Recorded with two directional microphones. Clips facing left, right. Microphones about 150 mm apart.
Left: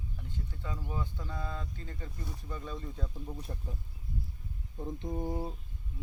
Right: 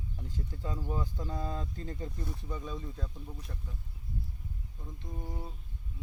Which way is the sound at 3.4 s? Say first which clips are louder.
Left 4 dB; 30° left (ahead or behind).